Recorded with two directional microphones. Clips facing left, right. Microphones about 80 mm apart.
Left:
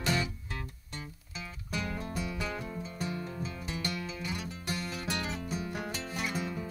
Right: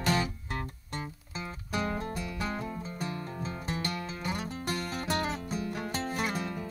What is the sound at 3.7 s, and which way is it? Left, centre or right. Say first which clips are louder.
Music: right 2 dB; right.